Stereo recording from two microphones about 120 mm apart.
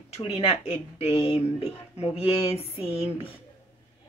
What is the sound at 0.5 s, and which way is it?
A woman's voice, 60° left (ahead or behind).